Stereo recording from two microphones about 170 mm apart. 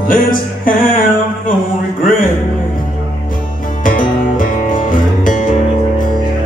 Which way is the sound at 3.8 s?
55° left (ahead or behind).